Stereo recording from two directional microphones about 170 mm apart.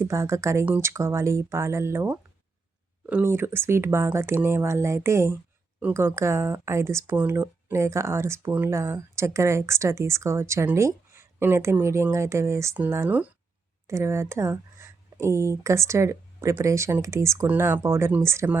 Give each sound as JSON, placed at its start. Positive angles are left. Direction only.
{"t": 0.0, "sound": "speech", "side_deg": -15}